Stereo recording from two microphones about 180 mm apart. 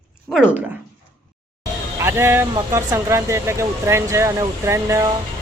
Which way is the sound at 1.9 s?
15° right (ahead or behind).